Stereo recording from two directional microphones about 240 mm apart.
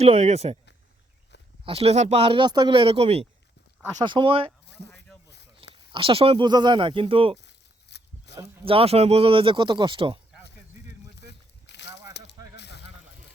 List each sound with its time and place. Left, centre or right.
0.0 s speech: right
1.6 s speech: right
5.9 s speech: right
7.3 s a sound: left
8.4 s speech: right
11.2 s a sound: left